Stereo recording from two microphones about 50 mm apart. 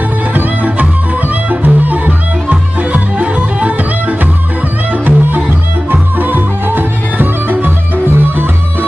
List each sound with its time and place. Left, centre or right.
0.3 s music: right
5.0 s music: right